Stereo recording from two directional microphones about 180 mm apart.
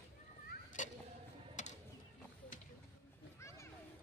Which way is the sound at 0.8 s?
45° left (ahead or behind).